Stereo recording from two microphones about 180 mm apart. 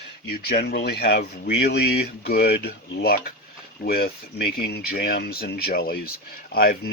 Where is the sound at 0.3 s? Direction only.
65° left (ahead or behind).